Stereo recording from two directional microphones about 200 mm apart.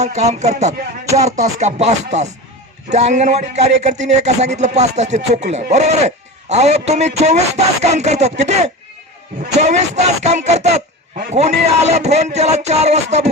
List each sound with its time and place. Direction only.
0.0 s speech: 35° right (ahead or behind)